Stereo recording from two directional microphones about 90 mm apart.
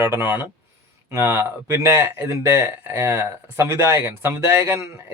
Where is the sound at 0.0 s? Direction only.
25° right (ahead or behind).